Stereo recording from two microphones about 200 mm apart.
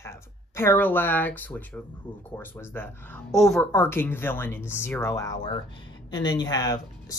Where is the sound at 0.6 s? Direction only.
10° left (ahead or behind).